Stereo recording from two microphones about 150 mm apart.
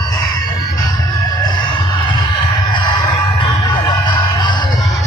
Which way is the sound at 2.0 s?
30° left (ahead or behind).